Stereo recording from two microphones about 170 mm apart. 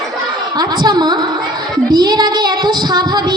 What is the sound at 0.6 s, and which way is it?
Child singing, 25° right (ahead or behind).